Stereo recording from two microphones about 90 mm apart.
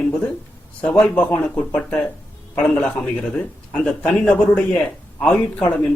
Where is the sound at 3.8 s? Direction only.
10° left (ahead or behind).